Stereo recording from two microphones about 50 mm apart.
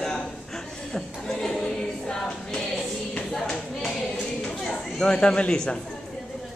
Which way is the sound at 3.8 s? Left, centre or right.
Centre.